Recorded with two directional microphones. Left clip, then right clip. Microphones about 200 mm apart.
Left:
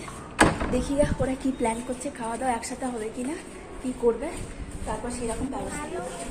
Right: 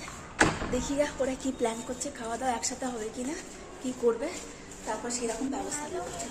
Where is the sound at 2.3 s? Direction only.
Centre (ahead or behind).